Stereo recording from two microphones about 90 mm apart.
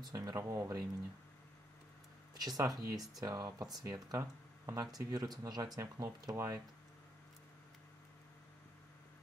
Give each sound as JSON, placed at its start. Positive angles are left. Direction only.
{"t": 0.0, "sound": "speech", "side_deg": -40}
{"t": 2.3, "sound": "speech", "side_deg": -45}